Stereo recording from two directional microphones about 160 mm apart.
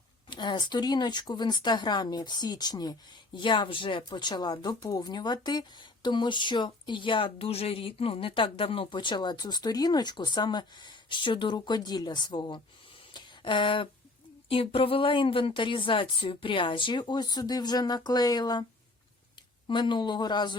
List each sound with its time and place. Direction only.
0.3 s a woman's voice: 30° left (ahead or behind)
19.6 s speech: 30° left (ahead or behind)